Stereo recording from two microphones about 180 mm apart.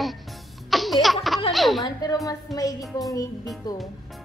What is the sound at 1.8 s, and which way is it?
Speech, 20° left (ahead or behind).